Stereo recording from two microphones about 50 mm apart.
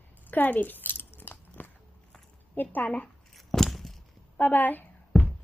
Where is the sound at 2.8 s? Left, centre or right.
Left.